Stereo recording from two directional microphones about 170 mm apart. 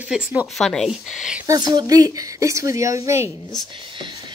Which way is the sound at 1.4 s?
20° right (ahead or behind).